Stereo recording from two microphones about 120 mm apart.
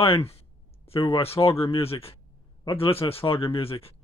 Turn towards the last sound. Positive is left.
turn(degrees=50)  # may be behind; listen again after turning